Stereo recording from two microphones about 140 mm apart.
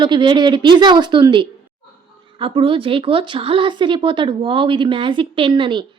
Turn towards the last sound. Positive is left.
turn(degrees=-35)  # may be behind; listen again after turning